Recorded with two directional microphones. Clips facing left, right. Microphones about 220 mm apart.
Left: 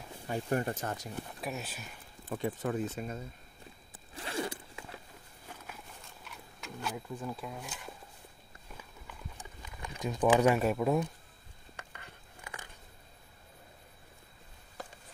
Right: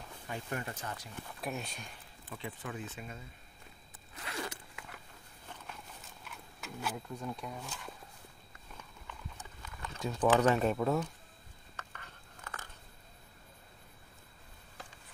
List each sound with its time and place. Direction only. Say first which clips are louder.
0.3 s speech: left 8 dB; 40° left (ahead or behind)
1.4 s speech: right 2 dB; 5° left (ahead or behind)
2.2 s speech: left 9 dB; 45° left (ahead or behind)
4.1 s zipper: left 5 dB; 30° left (ahead or behind)
6.3 s a sound: even; 5° right (ahead or behind)
9.6 s speech: left 1 dB; 15° left (ahead or behind)
11.7 s biting: left 1 dB; 15° left (ahead or behind)